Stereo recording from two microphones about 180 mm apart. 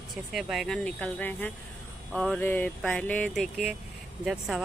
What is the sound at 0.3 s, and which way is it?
Speech, centre (ahead or behind).